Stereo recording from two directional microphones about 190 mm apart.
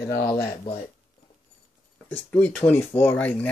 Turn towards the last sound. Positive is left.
turn(degrees=10)  # may be behind; listen again after turning